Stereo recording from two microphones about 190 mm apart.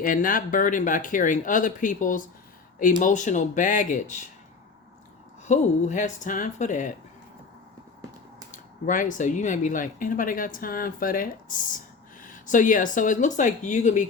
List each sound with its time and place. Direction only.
0.0 s speech: 45° left (ahead or behind)
5.5 s speech: 40° left (ahead or behind)
8.5 s speech: 45° left (ahead or behind)